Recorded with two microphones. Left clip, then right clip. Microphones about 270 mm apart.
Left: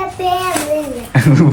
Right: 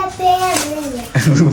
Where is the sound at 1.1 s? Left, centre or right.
Centre.